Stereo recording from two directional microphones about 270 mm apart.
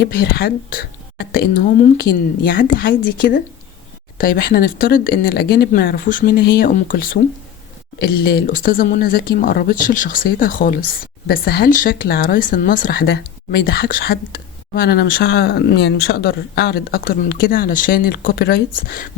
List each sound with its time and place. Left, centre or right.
0.0 s speech: left